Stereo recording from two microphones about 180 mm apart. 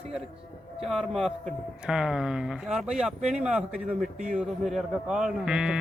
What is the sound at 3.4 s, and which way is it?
Speech, 5° right (ahead or behind).